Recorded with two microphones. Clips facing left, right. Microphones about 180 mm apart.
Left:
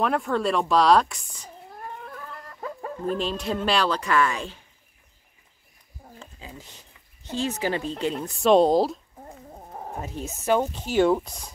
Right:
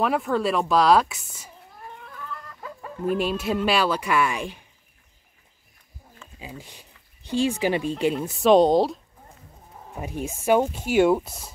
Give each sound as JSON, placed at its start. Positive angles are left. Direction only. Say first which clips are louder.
{"t": 0.0, "sound": "speech", "louder": "right 1 dB", "side_deg": 0}
{"t": 2.0, "sound": "chicken", "louder": "even", "side_deg": 45}
{"t": 3.1, "sound": "speech", "louder": "right 3 dB", "side_deg": -10}
{"t": 6.4, "sound": "speech", "louder": "right 6 dB", "side_deg": -10}
{"t": 8.2, "sound": "speech", "louder": "right 1 dB", "side_deg": -5}
{"t": 9.7, "sound": "wild animals", "louder": "left 8 dB", "side_deg": 55}
{"t": 10.0, "sound": "speech", "louder": "right 3 dB", "side_deg": -10}